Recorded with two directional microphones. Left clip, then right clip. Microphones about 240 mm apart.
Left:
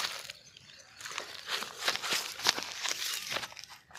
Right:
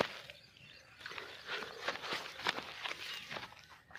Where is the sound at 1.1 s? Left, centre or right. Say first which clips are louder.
Left 6 dB; left.